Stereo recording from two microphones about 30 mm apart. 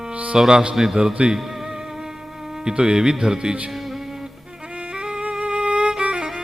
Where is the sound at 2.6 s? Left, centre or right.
Right.